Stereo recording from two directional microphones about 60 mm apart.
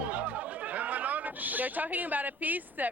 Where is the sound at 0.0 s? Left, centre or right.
Right.